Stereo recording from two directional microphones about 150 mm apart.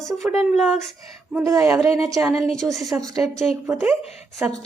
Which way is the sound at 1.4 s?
20° right (ahead or behind).